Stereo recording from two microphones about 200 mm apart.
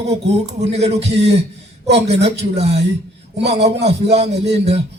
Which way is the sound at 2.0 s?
30° right (ahead or behind).